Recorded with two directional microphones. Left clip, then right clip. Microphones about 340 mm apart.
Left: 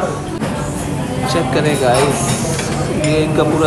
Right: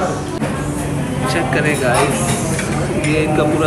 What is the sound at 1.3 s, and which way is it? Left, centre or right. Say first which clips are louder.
Speech: left 1 dB; centre.